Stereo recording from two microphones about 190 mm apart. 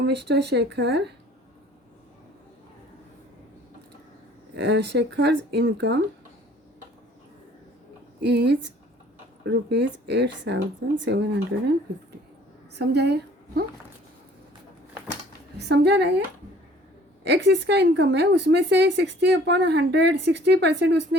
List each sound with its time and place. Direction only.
0.0 s speech: 65° right (ahead or behind)
4.5 s speech: 65° right (ahead or behind)
8.2 s speech: 65° right (ahead or behind)
12.7 s a woman's voice: 60° right (ahead or behind)
15.5 s speech: 60° right (ahead or behind)
17.2 s speech: 65° right (ahead or behind)